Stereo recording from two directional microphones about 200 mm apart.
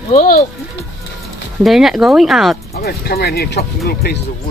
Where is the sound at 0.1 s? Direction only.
40° left (ahead or behind).